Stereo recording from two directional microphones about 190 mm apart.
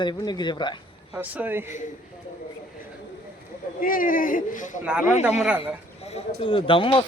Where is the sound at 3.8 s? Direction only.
45° left (ahead or behind).